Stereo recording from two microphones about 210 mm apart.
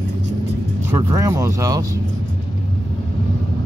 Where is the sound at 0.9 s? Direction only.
15° right (ahead or behind).